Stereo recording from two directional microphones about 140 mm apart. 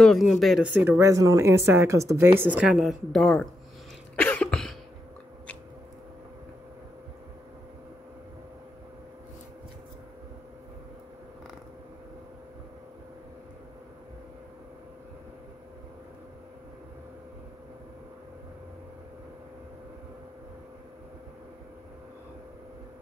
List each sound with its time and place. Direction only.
0.0 s a woman's voice: centre (ahead or behind)
4.2 s cough: 10° left (ahead or behind)